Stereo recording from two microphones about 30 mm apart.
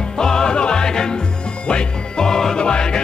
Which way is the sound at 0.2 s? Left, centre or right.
Left.